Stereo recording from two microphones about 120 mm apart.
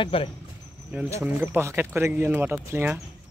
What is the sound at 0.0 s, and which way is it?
Speech, 50° left (ahead or behind).